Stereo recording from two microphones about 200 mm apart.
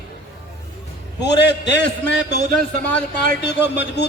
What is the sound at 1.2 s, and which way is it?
A man's voice, 60° left (ahead or behind).